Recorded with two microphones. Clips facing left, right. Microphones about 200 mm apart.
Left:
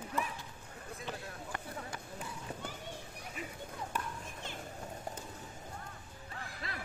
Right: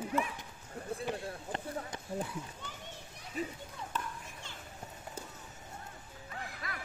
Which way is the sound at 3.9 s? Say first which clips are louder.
Right 2 dB; 15° left (ahead or behind).